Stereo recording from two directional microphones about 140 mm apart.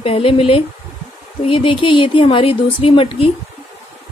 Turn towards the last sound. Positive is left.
turn(degrees=40)  # may be behind; listen again after turning